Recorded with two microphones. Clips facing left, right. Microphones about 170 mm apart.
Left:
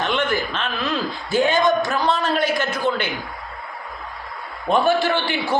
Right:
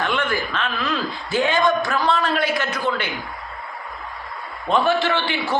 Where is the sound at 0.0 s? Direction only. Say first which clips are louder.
Left 1 dB; 20° left (ahead or behind).